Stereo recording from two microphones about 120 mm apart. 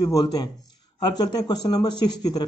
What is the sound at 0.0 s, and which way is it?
Speech, 30° left (ahead or behind).